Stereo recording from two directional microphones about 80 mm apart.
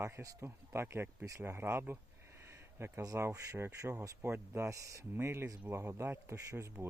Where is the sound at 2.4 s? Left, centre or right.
Right.